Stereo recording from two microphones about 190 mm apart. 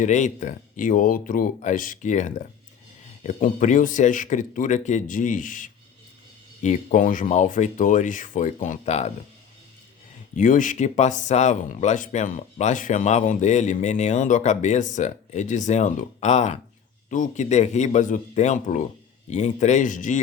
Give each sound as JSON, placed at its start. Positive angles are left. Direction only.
{"t": 0.0, "sound": "speech", "side_deg": 40}
{"t": 10.3, "sound": "speech", "side_deg": 40}